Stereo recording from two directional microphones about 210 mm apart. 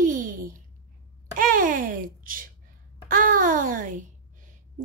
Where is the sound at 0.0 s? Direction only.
40° right (ahead or behind).